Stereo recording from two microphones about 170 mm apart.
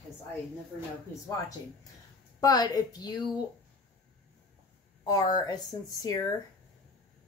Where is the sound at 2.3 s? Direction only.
20° left (ahead or behind).